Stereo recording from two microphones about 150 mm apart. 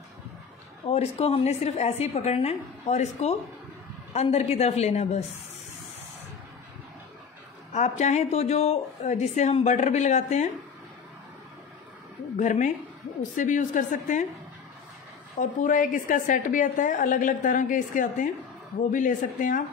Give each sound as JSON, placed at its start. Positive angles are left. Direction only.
{"t": 0.8, "sound": "a woman's voice", "side_deg": 40}
{"t": 7.7, "sound": "a woman's voice", "side_deg": 50}
{"t": 12.4, "sound": "a woman's voice", "side_deg": 55}
{"t": 15.6, "sound": "a woman's voice", "side_deg": 60}